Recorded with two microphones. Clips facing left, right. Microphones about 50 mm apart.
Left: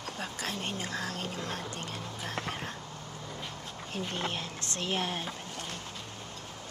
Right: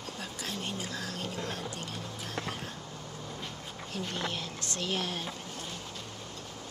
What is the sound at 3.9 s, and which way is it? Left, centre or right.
Speech, left.